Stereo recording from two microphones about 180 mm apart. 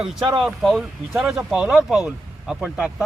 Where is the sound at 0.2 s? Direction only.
25° right (ahead or behind).